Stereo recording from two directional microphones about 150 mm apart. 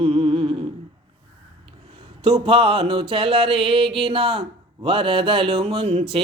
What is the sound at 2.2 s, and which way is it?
Music, 35° right (ahead or behind).